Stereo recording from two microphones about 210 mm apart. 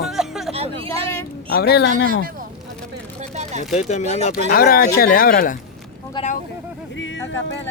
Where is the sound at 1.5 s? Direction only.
50° left (ahead or behind).